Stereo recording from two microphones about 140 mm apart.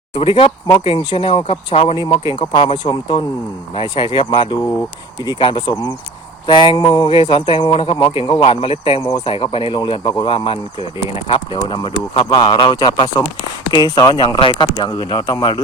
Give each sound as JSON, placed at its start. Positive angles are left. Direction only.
{"t": 0.1, "sound": "speech", "side_deg": 40}
{"t": 9.0, "sound": "speech", "side_deg": 30}